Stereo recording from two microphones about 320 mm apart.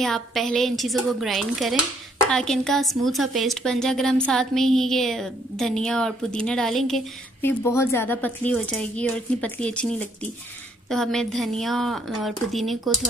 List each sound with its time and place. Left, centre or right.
0.0 s speech: centre